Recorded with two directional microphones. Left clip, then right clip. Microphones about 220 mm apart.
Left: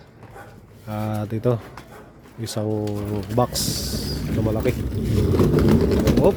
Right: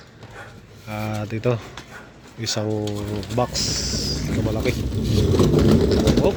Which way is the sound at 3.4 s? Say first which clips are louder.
Even; 25° left (ahead or behind).